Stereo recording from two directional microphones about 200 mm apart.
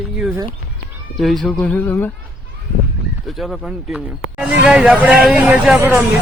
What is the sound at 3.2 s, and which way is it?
Speech, centre (ahead or behind).